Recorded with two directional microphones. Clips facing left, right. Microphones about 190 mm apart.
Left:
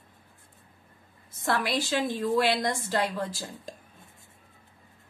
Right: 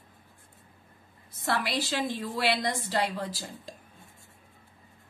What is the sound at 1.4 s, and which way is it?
A woman's voice, 50° left (ahead or behind).